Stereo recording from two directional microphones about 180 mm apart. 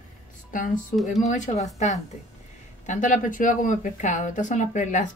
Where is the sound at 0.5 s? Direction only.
50° left (ahead or behind).